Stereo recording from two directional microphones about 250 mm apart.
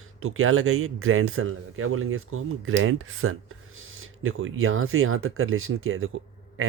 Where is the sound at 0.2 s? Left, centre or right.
Right.